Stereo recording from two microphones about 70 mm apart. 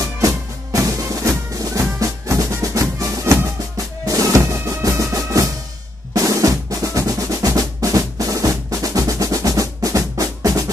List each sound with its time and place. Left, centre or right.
0.0 s music: right
6.1 s drum: right